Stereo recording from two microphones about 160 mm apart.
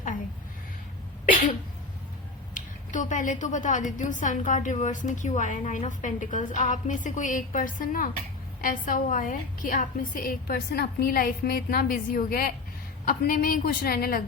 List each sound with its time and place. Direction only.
2.6 s a woman's voice: 50° left (ahead or behind); by 14.2 s 70° left (ahead or behind)